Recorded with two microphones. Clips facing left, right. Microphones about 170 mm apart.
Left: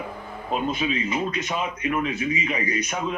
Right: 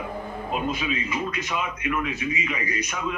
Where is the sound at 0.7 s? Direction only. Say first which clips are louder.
Left 3 dB; 30° left (ahead or behind).